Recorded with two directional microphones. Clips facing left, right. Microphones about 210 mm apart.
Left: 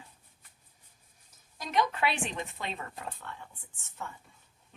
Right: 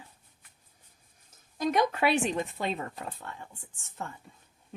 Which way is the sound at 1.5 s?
45° right (ahead or behind).